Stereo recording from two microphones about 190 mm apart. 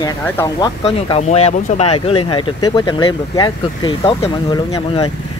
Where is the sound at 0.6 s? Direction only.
30° left (ahead or behind).